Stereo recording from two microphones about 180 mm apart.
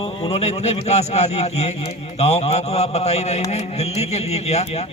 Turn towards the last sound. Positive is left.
turn(degrees=35)  # may be behind; listen again after turning